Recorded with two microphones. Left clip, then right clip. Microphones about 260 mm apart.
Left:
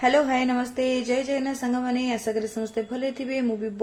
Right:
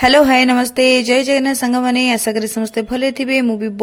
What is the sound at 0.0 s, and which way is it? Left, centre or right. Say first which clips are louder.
Speech: right 11 dB; right.